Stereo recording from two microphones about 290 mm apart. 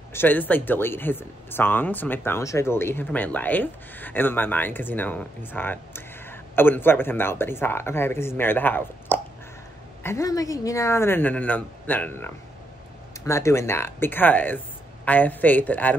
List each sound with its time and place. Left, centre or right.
0.1 s speech: centre